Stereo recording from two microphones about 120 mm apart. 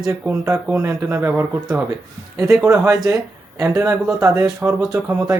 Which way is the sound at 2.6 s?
25° right (ahead or behind).